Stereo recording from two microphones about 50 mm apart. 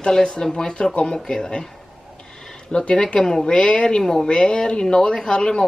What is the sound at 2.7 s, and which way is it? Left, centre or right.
A woman's voice, centre.